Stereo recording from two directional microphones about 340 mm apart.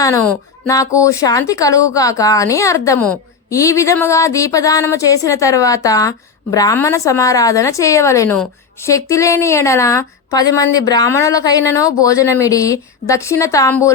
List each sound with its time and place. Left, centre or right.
0.0 s speech: centre